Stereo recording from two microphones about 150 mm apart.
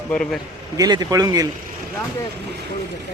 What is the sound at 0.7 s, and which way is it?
Speech, 25° right (ahead or behind).